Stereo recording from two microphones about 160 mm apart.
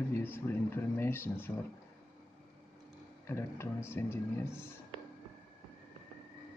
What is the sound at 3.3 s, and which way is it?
Speech, 15° left (ahead or behind).